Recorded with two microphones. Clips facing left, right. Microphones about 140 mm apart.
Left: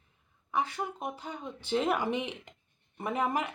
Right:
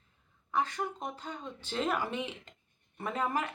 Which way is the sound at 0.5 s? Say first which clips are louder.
Even; 10° left (ahead or behind).